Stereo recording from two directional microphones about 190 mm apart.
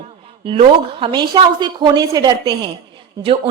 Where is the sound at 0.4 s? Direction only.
30° right (ahead or behind).